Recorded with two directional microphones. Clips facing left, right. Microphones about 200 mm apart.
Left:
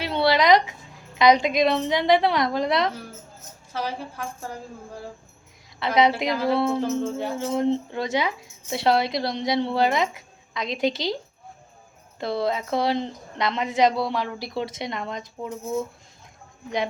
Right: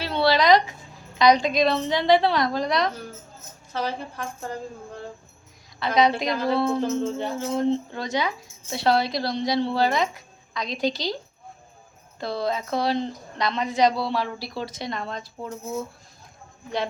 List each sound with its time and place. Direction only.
0.0 s a sound: 20° left (ahead or behind)
1.2 s a woman's voice: 20° left (ahead or behind)
3.7 s a woman's voice: 10° left (ahead or behind)
5.8 s a woman's voice: 25° left (ahead or behind)
6.2 s a woman's voice: 5° left (ahead or behind)
7.3 s a woman's voice: 25° left (ahead or behind)
12.2 s a woman's voice: 25° left (ahead or behind)